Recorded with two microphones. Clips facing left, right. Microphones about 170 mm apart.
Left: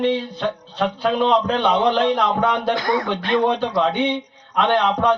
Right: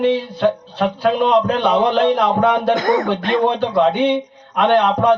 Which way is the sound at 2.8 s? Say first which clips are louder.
Right 5 dB; 45° right (ahead or behind).